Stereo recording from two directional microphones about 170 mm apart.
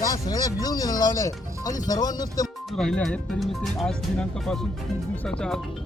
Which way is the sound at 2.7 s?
5° left (ahead or behind).